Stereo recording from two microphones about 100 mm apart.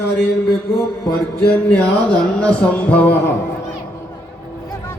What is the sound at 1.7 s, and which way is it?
Speech, 10° left (ahead or behind).